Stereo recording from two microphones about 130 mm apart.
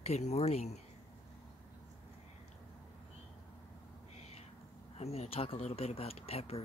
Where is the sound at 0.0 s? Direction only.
55° left (ahead or behind).